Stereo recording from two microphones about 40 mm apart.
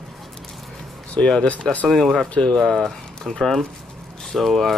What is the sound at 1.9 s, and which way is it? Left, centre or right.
Speech, centre.